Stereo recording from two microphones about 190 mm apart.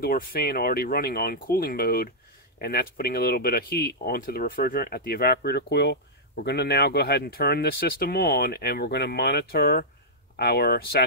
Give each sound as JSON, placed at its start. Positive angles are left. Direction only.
{"t": 0.0, "sound": "speech", "side_deg": 50}